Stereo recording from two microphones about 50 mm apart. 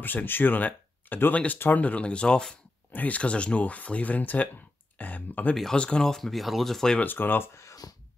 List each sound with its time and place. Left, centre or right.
0.0 s speech: left
1.3 s speech: left
2.9 s speech: left
4.9 s a sound: left
5.8 s speech: centre
7.0 s speech: left